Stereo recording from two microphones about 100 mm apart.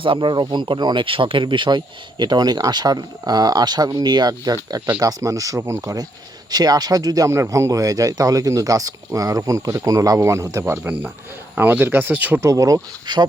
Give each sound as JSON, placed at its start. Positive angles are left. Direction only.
{"t": 0.0, "sound": "speech", "side_deg": -55}
{"t": 12.4, "sound": "speech", "side_deg": -35}